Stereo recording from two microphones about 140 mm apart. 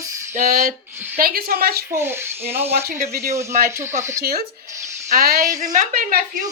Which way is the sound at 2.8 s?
75° right (ahead or behind).